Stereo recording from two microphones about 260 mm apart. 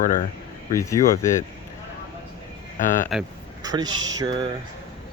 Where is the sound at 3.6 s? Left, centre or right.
Centre.